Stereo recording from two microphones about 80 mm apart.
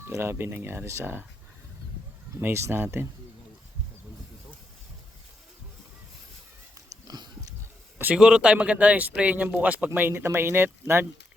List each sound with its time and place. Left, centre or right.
0.0 s speech: right
2.4 s speech: right
6.7 s dog: right
8.1 s speech: centre; by 11.0 s right